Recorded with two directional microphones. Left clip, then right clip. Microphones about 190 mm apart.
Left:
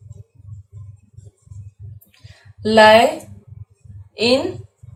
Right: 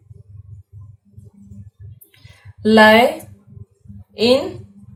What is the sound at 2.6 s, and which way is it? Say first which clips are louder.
Speech: even; 30° right (ahead or behind).